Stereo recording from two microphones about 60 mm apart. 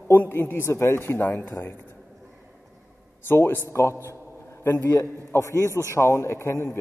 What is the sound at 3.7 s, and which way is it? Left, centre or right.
Speech, left.